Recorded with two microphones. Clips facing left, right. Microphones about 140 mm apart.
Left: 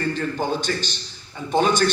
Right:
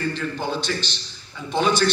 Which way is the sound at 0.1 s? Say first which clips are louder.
Left 2 dB; 50° left (ahead or behind).